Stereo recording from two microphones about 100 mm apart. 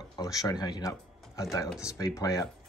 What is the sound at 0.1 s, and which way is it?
Speech, 35° left (ahead or behind).